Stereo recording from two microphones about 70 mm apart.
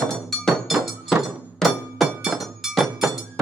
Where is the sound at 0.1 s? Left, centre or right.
Centre.